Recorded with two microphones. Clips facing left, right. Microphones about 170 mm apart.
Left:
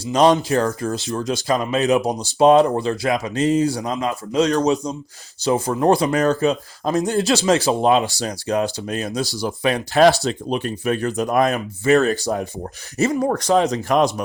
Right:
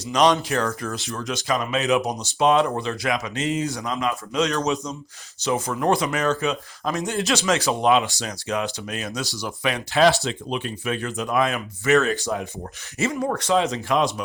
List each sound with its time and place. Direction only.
0.0 s speech: 30° left (ahead or behind)